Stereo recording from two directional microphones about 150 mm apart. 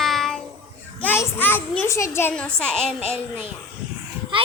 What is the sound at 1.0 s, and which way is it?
A child's voice, 15° left (ahead or behind).